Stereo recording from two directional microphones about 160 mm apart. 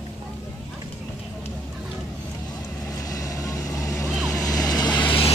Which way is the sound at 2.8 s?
20° left (ahead or behind).